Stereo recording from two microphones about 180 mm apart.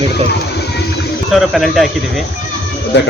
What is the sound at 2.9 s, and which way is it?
Speech, 75° left (ahead or behind).